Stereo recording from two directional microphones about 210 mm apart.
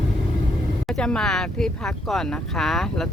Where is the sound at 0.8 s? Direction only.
5° left (ahead or behind).